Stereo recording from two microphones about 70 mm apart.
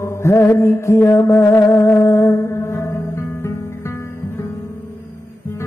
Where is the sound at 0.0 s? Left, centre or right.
Left.